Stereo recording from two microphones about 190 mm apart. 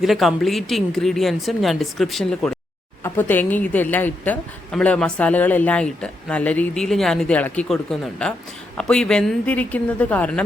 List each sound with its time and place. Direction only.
0.0 s a woman's voice: centre (ahead or behind)